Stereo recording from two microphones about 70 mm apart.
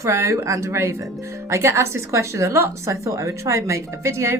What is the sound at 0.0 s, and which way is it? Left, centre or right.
A woman's voice, right.